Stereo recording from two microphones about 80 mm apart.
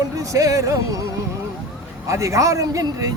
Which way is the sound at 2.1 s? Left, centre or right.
Right.